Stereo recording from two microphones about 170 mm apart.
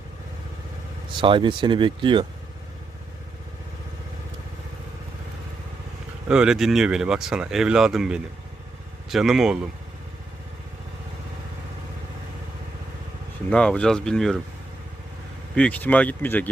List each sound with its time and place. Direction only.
1.2 s speech: 30° right (ahead or behind)
6.2 s speech: 5° right (ahead or behind)
13.5 s speech: 5° left (ahead or behind)
15.5 s speech: 5° left (ahead or behind)